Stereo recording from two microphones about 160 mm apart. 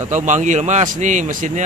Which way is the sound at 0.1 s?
50° right (ahead or behind).